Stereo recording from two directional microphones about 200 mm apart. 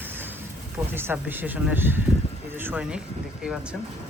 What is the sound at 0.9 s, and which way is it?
Speech, 10° right (ahead or behind).